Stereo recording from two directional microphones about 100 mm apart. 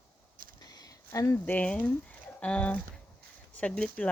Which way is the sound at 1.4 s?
15° left (ahead or behind).